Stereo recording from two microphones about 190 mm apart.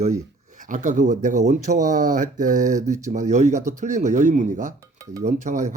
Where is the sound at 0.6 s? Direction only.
40° right (ahead or behind).